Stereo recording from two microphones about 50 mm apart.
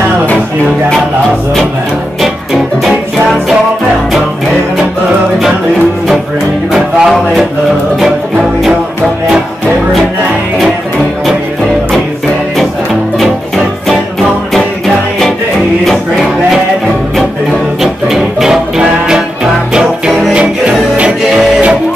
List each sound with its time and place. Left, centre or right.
2.2 s music: centre
6.7 s music: centre
15.8 s music: centre
18.0 s music: centre; by 21.1 s right
21.2 s music: centre